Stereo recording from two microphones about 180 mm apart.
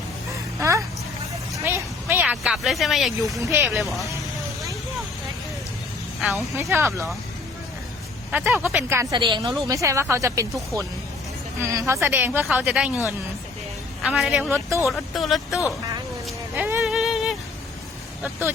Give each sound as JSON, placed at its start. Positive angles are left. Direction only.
{"t": 0.3, "sound": "a sound", "side_deg": -15}
{"t": 3.4, "sound": "speech", "side_deg": -15}
{"t": 3.7, "sound": "speech", "side_deg": 0}
{"t": 6.1, "sound": "speech", "side_deg": 0}
{"t": 6.6, "sound": "speech", "side_deg": -15}
{"t": 8.3, "sound": "a woman's voice", "side_deg": -10}
{"t": 11.6, "sound": "speech", "side_deg": -15}
{"t": 14.0, "sound": "speech", "side_deg": -5}
{"t": 16.6, "sound": "a sound", "side_deg": -5}
{"t": 18.2, "sound": "speech", "side_deg": -10}